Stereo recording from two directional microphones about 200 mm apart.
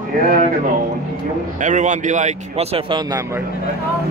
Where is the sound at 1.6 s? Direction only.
40° right (ahead or behind); by 3.4 s 15° right (ahead or behind).